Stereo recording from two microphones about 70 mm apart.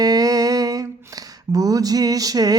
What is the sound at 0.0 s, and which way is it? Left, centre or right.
Speech, right.